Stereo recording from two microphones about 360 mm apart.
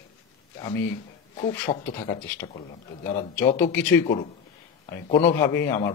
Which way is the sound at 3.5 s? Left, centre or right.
Centre.